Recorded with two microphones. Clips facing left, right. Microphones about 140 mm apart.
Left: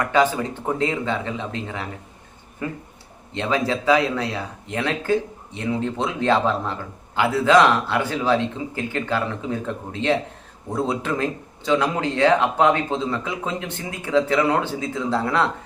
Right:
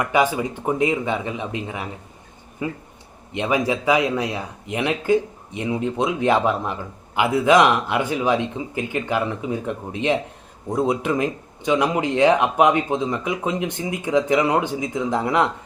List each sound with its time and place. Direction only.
0.0 s speech: 15° right (ahead or behind)